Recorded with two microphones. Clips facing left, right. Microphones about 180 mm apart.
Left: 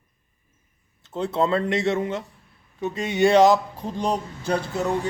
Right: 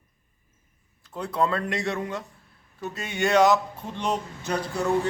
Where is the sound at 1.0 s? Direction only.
25° left (ahead or behind).